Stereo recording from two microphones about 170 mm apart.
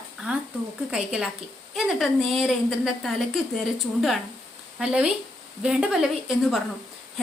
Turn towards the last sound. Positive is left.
turn(degrees=0)  # may be behind; listen again after turning